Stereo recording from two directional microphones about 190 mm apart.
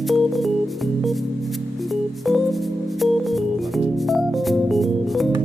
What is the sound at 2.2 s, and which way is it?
Music, centre (ahead or behind).